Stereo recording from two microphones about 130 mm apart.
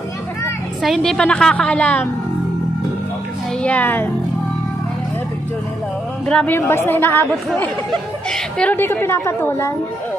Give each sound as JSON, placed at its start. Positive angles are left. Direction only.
{"t": 0.8, "sound": "a woman's voice", "side_deg": 0}
{"t": 3.6, "sound": "speech", "side_deg": 10}
{"t": 6.2, "sound": "speech", "side_deg": 10}